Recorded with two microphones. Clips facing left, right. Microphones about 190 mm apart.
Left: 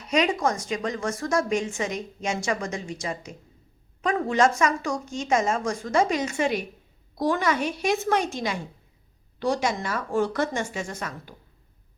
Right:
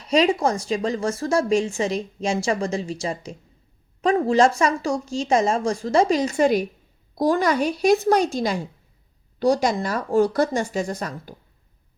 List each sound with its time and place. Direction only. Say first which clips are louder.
0.1 s a woman's voice: right 4 dB; 30° right (ahead or behind)